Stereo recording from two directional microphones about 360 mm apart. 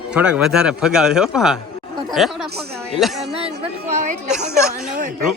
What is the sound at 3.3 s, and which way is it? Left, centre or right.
A woman's voice, centre.